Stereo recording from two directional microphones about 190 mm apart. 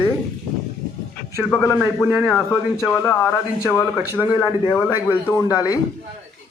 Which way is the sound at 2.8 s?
10° left (ahead or behind).